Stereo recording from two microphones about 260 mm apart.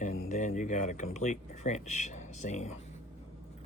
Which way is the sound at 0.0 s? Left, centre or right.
Left.